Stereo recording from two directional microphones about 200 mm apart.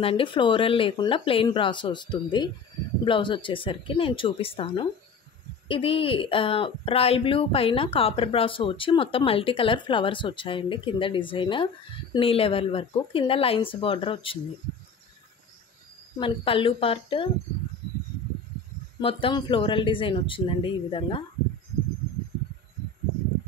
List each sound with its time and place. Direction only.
0.0 s speech: 25° left (ahead or behind)
16.2 s speech: 25° left (ahead or behind)
18.9 s speech: 25° left (ahead or behind)